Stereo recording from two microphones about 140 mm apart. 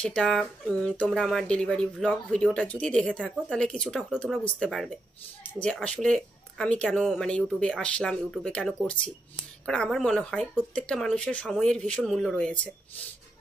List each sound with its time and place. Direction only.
0.0 s a woman's voice: 5° left (ahead or behind)